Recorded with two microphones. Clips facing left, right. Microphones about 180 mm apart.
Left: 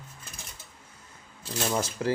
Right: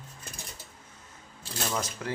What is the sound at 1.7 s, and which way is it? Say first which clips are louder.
Speech: left 6 dB; 30° left (ahead or behind).